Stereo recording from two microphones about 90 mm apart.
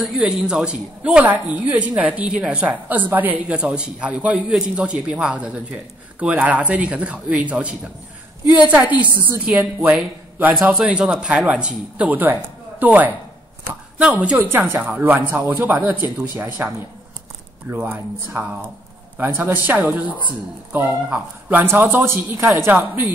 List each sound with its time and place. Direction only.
0.0 s a man's voice: 5° right (ahead or behind)
17.6 s speech: 20° right (ahead or behind)
21.1 s speech: 20° right (ahead or behind)